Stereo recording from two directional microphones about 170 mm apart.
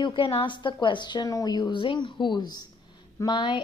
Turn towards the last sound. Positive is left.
turn(degrees=30)  # may be behind; listen again after turning